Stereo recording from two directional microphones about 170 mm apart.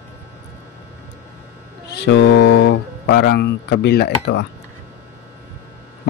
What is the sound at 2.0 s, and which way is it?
Speech, 90° left.